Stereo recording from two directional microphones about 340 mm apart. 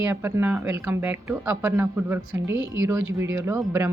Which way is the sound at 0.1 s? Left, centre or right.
Centre.